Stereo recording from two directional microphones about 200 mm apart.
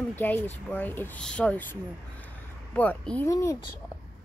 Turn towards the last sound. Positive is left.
turn(degrees=15)  # may be behind; listen again after turning